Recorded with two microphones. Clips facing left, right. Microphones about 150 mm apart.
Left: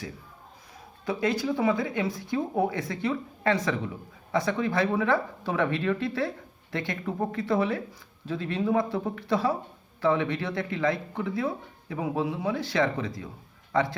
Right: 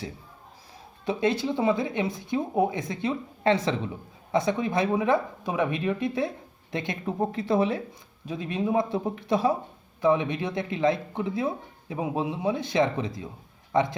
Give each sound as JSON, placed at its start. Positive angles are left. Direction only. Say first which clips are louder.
{"t": 1.0, "sound": "speech", "louder": "right 1 dB", "side_deg": -25}